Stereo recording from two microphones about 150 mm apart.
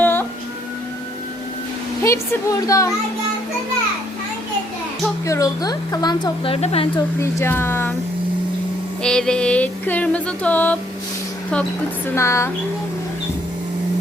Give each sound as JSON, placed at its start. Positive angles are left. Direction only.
{"t": 0.0, "sound": "a sound", "side_deg": 15}
{"t": 2.0, "sound": "speech", "side_deg": 20}
{"t": 5.2, "sound": "speech", "side_deg": 20}
{"t": 7.2, "sound": "speech", "side_deg": 15}
{"t": 9.0, "sound": "a sound", "side_deg": 5}
{"t": 12.0, "sound": "speech", "side_deg": 20}